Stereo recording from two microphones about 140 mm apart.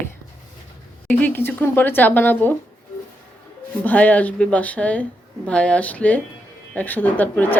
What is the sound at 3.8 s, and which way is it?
Speech, 10° left (ahead or behind).